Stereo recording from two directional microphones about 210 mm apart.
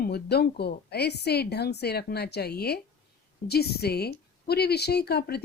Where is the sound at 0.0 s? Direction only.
50° left (ahead or behind).